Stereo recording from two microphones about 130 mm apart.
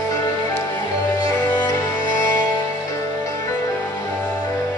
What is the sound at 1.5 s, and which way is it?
Music, 30° left (ahead or behind).